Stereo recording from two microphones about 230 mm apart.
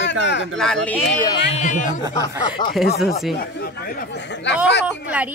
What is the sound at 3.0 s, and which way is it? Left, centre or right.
Speech, centre.